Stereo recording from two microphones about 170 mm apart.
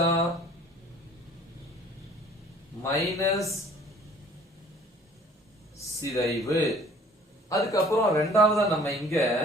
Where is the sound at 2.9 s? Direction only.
Centre (ahead or behind).